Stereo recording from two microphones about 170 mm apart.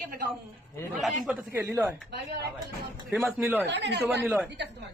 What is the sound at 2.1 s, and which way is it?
Speech, 75° right (ahead or behind).